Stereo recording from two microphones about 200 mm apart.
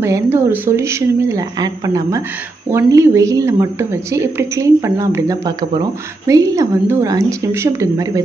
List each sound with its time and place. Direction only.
0.0 s a woman's voice: 15° right (ahead or behind)